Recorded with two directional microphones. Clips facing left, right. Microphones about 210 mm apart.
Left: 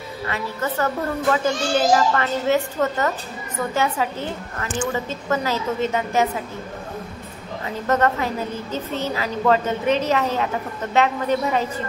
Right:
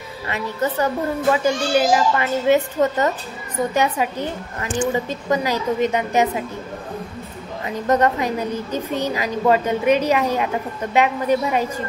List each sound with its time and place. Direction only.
0.3 s a woman's voice: 20° right (ahead or behind)
7.6 s a woman's voice: 15° right (ahead or behind)